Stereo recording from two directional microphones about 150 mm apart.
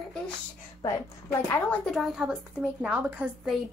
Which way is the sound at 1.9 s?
Centre (ahead or behind).